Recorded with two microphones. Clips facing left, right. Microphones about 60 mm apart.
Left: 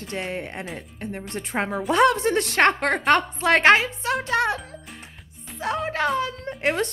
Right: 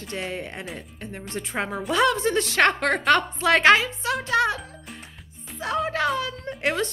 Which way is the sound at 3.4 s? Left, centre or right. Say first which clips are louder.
Left 1 dB; left.